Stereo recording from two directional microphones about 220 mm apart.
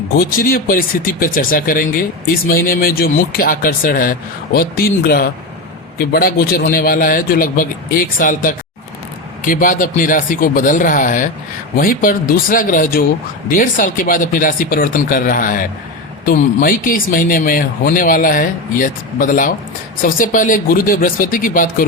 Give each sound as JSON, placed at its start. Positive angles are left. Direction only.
{"t": 0.2, "sound": "speech", "side_deg": 40}